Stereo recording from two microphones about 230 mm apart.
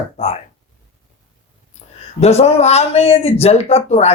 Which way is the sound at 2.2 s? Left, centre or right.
Left.